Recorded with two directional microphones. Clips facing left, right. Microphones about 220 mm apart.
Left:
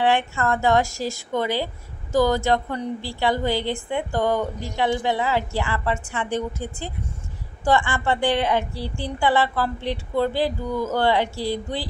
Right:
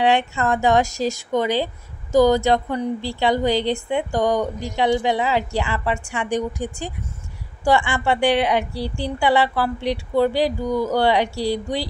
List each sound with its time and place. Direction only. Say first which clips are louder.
0.0 s a woman's voice: right 2 dB; 15° right (ahead or behind)